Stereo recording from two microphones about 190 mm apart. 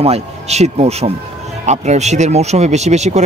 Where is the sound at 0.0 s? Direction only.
35° right (ahead or behind).